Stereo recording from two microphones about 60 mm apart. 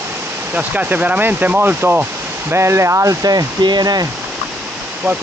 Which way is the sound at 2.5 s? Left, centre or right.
Right.